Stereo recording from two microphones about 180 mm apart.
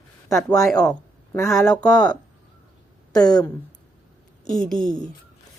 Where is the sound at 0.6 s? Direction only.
5° left (ahead or behind).